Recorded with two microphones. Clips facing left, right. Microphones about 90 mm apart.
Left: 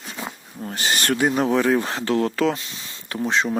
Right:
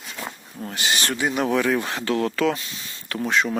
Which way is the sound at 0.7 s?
40° left (ahead or behind).